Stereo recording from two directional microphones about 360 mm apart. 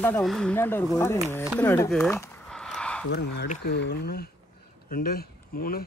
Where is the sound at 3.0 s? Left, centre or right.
Left.